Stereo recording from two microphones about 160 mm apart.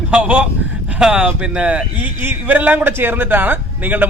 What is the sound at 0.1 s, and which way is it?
Speech, 5° right (ahead or behind).